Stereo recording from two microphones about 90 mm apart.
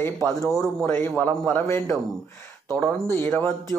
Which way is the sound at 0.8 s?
25° left (ahead or behind).